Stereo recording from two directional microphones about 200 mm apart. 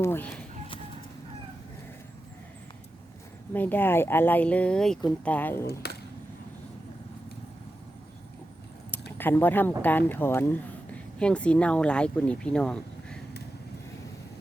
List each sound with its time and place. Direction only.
0.0 s speech: 10° left (ahead or behind)
3.5 s speech: 10° left (ahead or behind)
5.8 s a sound: 55° left (ahead or behind)
9.1 s speech: 10° left (ahead or behind)